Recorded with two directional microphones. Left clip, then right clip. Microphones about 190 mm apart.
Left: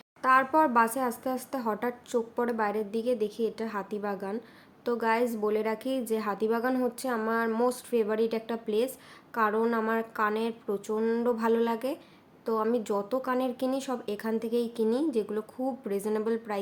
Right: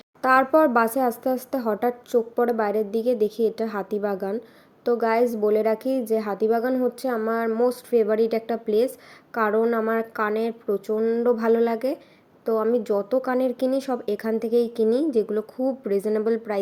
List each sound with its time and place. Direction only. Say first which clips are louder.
0.2 s a woman's voice: right 5 dB; 25° right (ahead or behind)